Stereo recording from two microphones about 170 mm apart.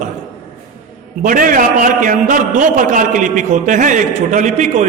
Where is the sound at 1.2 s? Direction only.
55° right (ahead or behind).